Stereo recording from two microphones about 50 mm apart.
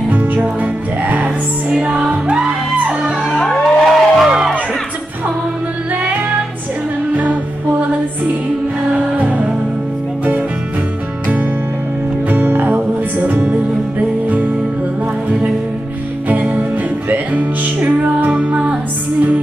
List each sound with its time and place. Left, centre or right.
0.1 s music: right
1.7 s music: centre
3.0 s music: centre
3.4 s music: centre
6.0 s music: right
9.1 s music: right
12.3 s music: right
16.3 s music: right